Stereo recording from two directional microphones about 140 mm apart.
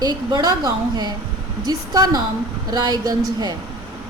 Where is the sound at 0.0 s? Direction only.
30° right (ahead or behind).